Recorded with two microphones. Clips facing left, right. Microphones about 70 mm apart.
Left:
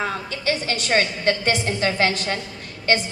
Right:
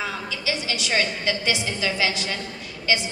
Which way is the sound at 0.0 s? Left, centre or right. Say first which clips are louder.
Left 4 dB; left.